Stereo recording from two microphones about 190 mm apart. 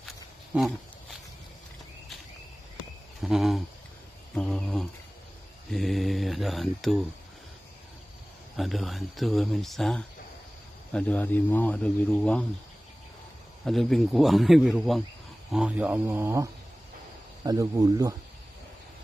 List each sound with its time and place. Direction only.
0.6 s a sound: centre (ahead or behind)
3.2 s speech: centre (ahead or behind)
4.4 s a sound: 5° left (ahead or behind)
5.7 s mantra: centre (ahead or behind)
8.5 s speech: centre (ahead or behind)
13.7 s speech: centre (ahead or behind)
17.5 s speech: 20° right (ahead or behind)